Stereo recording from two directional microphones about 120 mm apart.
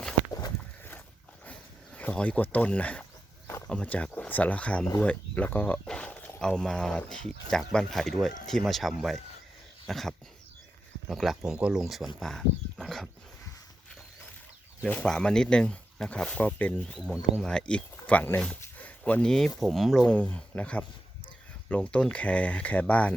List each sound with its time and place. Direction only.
0.3 s walk: 30° left (ahead or behind)
2.0 s speech: 10° left (ahead or behind)
9.8 s a sound: centre (ahead or behind)
11.1 s speech: centre (ahead or behind)
14.8 s speech: 10° left (ahead or behind)
18.4 s a sound: 10° left (ahead or behind)
19.5 s speech: centre (ahead or behind)